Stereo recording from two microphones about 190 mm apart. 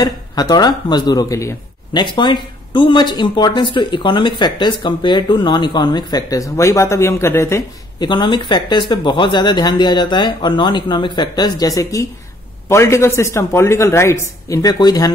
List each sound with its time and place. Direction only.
0.0 s a man's voice: 20° left (ahead or behind)